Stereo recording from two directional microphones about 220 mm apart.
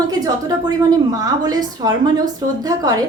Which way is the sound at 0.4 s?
15° right (ahead or behind).